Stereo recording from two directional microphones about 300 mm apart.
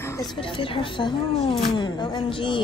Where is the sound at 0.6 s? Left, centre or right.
Centre.